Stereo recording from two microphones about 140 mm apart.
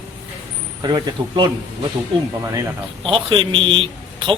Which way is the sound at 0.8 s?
30° right (ahead or behind).